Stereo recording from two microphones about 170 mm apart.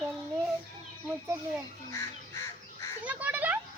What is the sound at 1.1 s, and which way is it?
Speech, 10° right (ahead or behind).